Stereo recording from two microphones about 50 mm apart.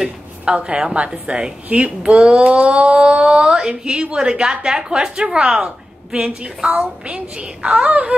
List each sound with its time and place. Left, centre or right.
0.6 s a child's voice: right
1.7 s speech: right
2.0 s a woman's voice: centre